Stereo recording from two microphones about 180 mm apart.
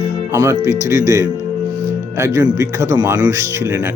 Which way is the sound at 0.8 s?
15° right (ahead or behind).